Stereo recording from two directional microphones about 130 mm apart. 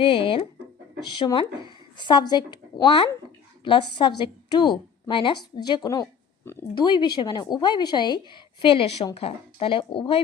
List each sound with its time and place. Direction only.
0.0 s speech: 45° left (ahead or behind)
3.6 s speech: 40° left (ahead or behind)
6.4 s a sound: 15° left (ahead or behind)
6.7 s speech: 35° left (ahead or behind)